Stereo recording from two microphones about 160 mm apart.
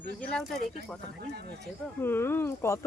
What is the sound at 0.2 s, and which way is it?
Speech, 5° left (ahead or behind).